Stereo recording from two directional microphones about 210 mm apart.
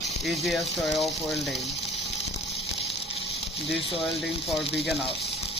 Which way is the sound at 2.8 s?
25° left (ahead or behind).